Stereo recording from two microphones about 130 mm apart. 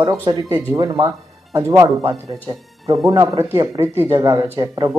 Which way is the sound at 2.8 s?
25° right (ahead or behind).